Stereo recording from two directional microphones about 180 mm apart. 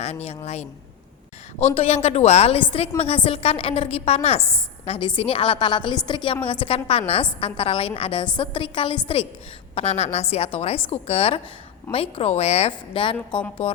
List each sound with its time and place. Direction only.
0.0 s a woman's voice: 35° left (ahead or behind)
1.7 s a woman's voice: 35° left (ahead or behind)